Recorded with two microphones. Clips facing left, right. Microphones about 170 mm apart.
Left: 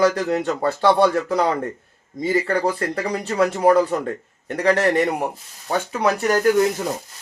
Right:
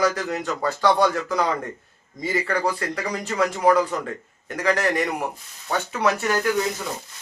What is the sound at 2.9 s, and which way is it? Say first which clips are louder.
A man's voice: left 4 dB; 30° left (ahead or behind).